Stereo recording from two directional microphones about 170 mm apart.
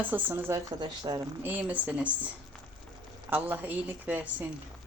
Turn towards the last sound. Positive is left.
turn(degrees=-10)  # may be behind; listen again after turning